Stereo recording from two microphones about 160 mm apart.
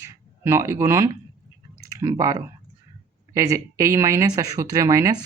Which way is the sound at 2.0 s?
20° right (ahead or behind).